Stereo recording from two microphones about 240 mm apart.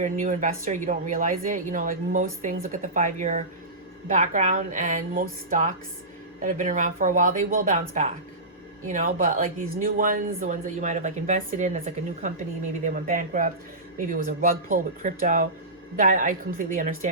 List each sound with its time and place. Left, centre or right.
0.0 s speech: right